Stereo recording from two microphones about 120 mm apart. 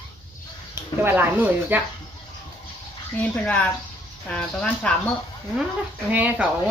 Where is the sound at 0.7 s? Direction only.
20° right (ahead or behind).